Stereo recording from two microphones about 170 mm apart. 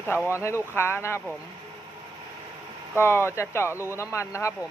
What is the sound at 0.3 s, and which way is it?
Speech, 15° left (ahead or behind).